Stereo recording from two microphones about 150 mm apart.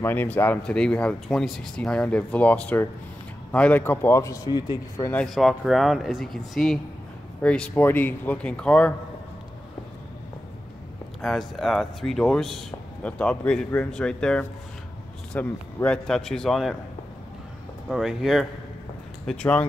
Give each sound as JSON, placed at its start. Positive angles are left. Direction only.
{"t": 0.0, "sound": "a man's voice", "side_deg": 15}
{"t": 5.1, "sound": "speech", "side_deg": 0}
{"t": 11.1, "sound": "speech", "side_deg": 0}
{"t": 17.8, "sound": "speech", "side_deg": 0}